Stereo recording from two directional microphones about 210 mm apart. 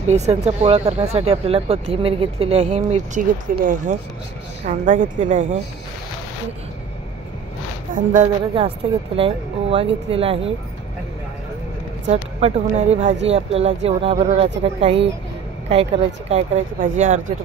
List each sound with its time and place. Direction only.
0.1 s speech: 30° right (ahead or behind)
7.9 s speech: 35° right (ahead or behind)
12.1 s speech: 30° right (ahead or behind)